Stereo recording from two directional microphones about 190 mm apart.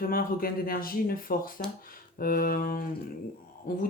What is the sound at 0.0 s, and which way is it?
Speech, 50° left (ahead or behind).